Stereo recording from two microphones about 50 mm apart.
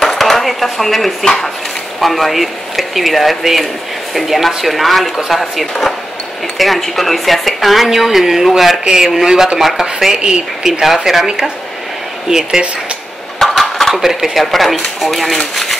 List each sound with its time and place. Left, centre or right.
0.0 s dishes: centre
1.2 s speech: centre
2.0 s a woman's voice: centre
13.4 s dishes: centre
14.0 s a woman's voice: centre